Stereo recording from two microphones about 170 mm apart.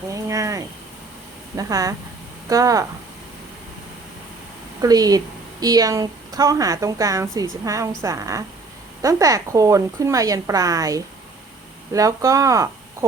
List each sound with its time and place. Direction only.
0.1 s cricket: 20° right (ahead or behind)
1.5 s a woman's voice: 20° right (ahead or behind)
4.8 s a woman's voice: 20° right (ahead or behind)